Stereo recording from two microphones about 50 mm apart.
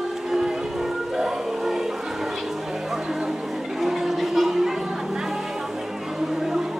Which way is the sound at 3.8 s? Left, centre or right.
Centre.